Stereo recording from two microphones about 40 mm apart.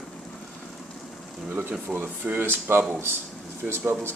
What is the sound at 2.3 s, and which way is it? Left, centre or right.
Speech, right.